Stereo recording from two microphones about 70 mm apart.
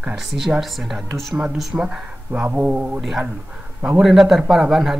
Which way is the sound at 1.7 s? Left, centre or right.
Right.